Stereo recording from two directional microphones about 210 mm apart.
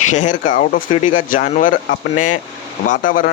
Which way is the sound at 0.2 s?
40° left (ahead or behind).